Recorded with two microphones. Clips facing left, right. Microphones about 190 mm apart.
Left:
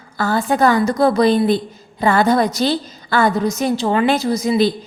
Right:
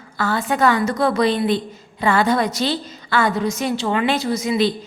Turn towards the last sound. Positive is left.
turn(degrees=35)  # may be behind; listen again after turning